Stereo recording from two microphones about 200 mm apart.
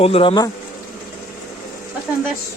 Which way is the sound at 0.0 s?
30° left (ahead or behind).